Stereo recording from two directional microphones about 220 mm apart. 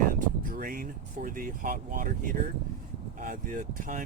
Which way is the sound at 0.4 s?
40° right (ahead or behind).